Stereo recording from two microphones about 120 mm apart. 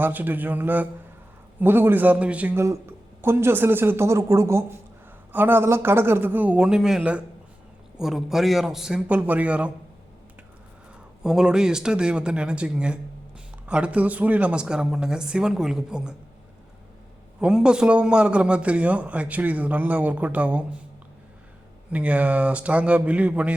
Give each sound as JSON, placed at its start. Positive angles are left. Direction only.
{"t": 0.0, "sound": "a man's voice", "side_deg": -15}
{"t": 11.2, "sound": "a man's voice", "side_deg": -5}
{"t": 17.4, "sound": "a man's voice", "side_deg": -5}
{"t": 21.8, "sound": "a man's voice", "side_deg": -10}